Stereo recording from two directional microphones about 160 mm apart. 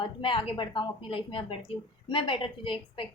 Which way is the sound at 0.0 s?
30° left (ahead or behind).